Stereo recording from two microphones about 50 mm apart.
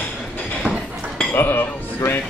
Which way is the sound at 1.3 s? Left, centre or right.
Left.